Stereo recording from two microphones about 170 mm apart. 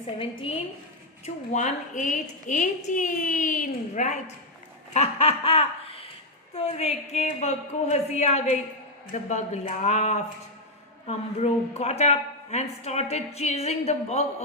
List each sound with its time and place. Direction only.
0.2 s speech: 30° left (ahead or behind)
1.2 s a woman's voice: 45° left (ahead or behind)
4.9 s chuckle: 35° left (ahead or behind)
6.5 s a woman's voice: 35° left (ahead or behind)